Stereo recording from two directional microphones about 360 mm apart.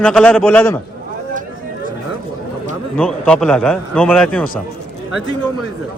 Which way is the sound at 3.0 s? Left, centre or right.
Centre.